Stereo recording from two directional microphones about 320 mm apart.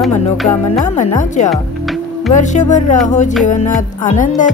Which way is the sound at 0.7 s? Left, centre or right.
Left.